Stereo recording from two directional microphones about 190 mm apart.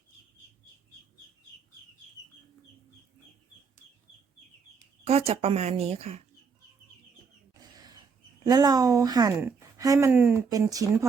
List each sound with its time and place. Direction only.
5.0 s a woman's voice: 30° right (ahead or behind)
7.6 s a sound: 20° right (ahead or behind)
8.4 s a woman's voice: 20° right (ahead or behind)